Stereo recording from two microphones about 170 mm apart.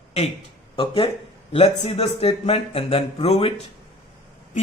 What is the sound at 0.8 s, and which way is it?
A man's voice, 30° left (ahead or behind).